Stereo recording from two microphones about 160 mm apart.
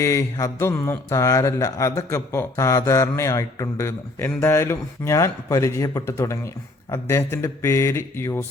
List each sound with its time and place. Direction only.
0.0 s a man's voice: 20° left (ahead or behind)